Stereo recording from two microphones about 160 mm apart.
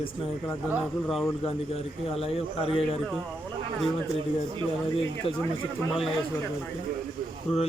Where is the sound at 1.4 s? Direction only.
40° left (ahead or behind).